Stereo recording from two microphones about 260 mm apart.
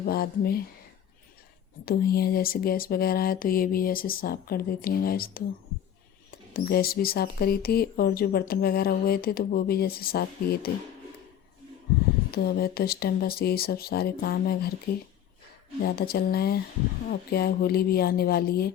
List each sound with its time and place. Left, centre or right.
0.0 s speech: left
1.8 s speech: left
12.3 s speech: left
15.8 s speech: left